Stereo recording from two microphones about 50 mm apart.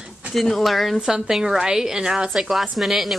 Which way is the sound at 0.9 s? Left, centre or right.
Centre.